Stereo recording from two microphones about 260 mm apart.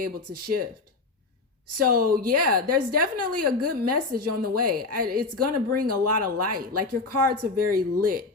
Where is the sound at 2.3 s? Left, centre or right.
Right.